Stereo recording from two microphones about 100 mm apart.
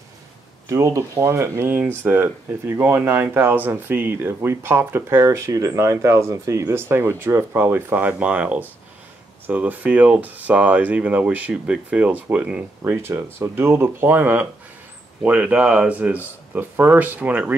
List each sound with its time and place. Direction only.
0.7 s speech: 30° right (ahead or behind); by 12.9 s 15° right (ahead or behind)
12.9 s speech: 25° right (ahead or behind)